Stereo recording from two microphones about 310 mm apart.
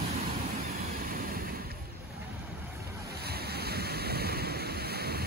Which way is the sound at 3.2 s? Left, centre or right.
Right.